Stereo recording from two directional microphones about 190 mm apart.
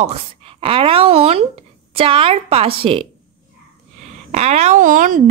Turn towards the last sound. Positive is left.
turn(degrees=-45)  # may be behind; listen again after turning